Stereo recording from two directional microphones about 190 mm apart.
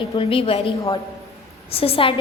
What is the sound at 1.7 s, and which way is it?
Speech, 30° left (ahead or behind).